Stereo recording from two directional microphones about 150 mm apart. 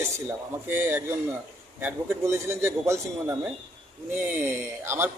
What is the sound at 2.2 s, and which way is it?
A man's voice, 20° right (ahead or behind).